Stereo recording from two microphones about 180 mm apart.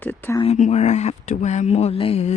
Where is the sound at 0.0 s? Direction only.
10° left (ahead or behind).